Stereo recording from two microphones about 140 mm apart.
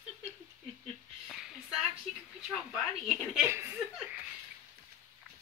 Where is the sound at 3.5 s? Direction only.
20° right (ahead or behind).